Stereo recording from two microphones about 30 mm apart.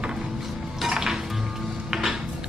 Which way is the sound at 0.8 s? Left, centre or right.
Centre.